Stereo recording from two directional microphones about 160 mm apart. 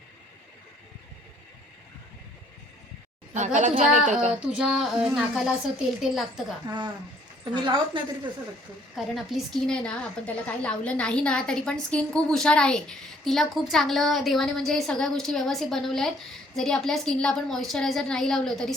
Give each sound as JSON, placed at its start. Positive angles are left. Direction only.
{"t": 3.3, "sound": "a woman's voice", "side_deg": -50}
{"t": 4.4, "sound": "a woman's voice", "side_deg": -5}
{"t": 6.7, "sound": "a woman's voice", "side_deg": -30}
{"t": 9.1, "sound": "a woman's voice", "side_deg": 0}